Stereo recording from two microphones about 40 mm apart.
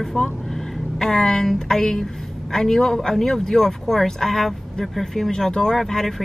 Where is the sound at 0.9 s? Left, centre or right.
Centre.